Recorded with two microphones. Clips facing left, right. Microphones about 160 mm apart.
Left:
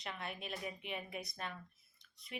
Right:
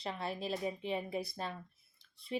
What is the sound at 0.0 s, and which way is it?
A woman's voice, 30° right (ahead or behind).